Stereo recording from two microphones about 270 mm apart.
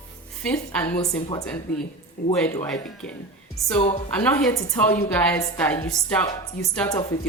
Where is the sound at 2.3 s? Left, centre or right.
Centre.